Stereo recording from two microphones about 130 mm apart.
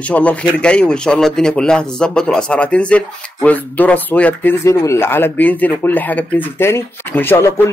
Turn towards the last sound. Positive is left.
turn(degrees=20)  # may be behind; listen again after turning